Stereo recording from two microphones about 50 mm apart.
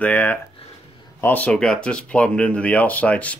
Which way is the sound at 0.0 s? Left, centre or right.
Left.